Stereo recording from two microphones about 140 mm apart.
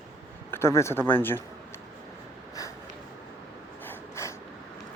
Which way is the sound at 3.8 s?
20° left (ahead or behind).